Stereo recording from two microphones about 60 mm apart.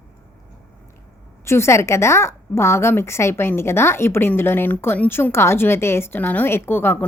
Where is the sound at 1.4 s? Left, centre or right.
Left.